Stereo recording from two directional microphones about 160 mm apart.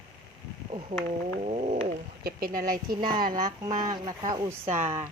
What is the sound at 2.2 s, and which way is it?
Speech, 60° right (ahead or behind).